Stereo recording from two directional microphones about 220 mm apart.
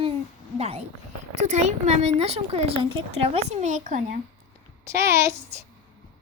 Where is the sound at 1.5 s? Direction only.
30° right (ahead or behind).